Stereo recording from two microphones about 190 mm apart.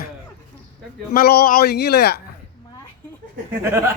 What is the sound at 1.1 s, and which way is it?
A man's voice, 55° left (ahead or behind).